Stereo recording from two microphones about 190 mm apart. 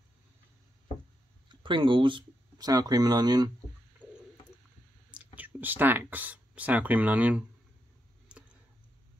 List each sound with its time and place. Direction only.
1.5 s speech: 25° right (ahead or behind)
4.0 s a sound: 5° left (ahead or behind)
5.1 s speech: 10° right (ahead or behind)
8.3 s tick: 5° right (ahead or behind)